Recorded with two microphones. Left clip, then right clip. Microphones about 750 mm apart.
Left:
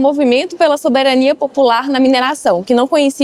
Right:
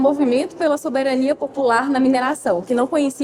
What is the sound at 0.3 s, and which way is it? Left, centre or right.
A woman's voice, left.